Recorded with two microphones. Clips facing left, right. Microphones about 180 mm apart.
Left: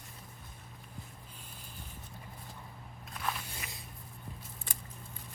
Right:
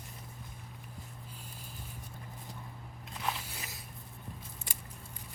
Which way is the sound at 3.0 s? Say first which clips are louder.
Right 1 dB; 20° right (ahead or behind).